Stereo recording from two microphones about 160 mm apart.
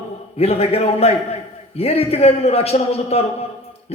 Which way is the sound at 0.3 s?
40° left (ahead or behind).